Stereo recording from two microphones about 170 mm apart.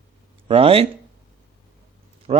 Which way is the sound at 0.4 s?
35° right (ahead or behind).